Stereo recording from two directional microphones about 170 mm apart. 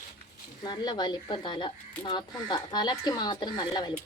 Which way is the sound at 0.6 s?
25° left (ahead or behind).